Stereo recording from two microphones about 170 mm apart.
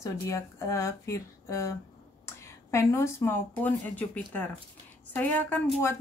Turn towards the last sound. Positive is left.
turn(degrees=10)  # may be behind; listen again after turning